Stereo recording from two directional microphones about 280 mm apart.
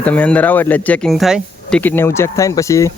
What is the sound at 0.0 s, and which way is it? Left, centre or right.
Speech, centre.